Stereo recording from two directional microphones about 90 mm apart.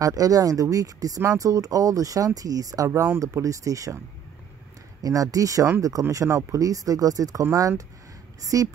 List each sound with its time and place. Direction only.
0.0 s speech: 40° right (ahead or behind)
5.0 s speech: 40° right (ahead or behind)